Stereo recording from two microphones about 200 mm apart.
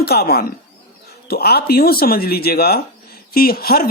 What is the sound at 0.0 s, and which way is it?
Speech, 50° left (ahead or behind).